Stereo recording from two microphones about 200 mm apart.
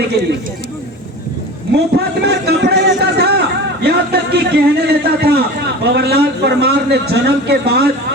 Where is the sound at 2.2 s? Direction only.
55° right (ahead or behind).